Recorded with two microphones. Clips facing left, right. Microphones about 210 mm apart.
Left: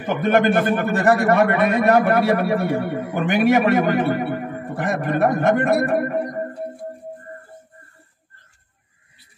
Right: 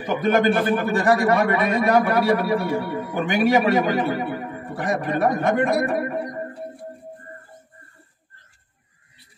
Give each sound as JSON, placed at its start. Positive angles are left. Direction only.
{"t": 0.0, "sound": "a man's voice", "side_deg": 55}